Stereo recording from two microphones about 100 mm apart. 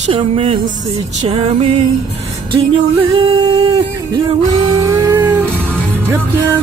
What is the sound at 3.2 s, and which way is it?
Singing, 60° right (ahead or behind).